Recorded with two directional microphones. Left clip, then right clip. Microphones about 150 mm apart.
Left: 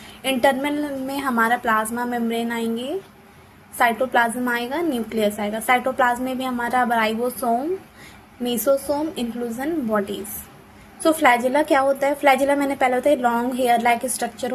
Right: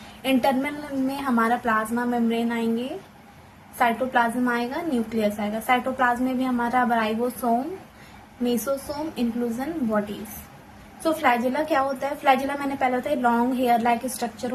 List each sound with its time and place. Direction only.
0.2 s a woman's voice: 35° left (ahead or behind)
11.0 s a woman's voice: 40° left (ahead or behind)